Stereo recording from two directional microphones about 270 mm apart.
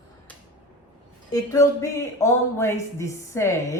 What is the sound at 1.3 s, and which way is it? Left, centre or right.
Speech, centre.